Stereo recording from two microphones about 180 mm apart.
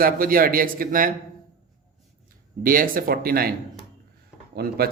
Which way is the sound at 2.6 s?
50° right (ahead or behind).